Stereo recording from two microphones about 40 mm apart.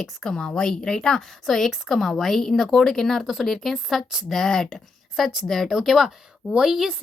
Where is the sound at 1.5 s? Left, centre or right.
Centre.